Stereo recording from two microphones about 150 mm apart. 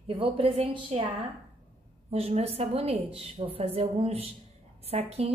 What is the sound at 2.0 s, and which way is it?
A woman's voice, 40° right (ahead or behind).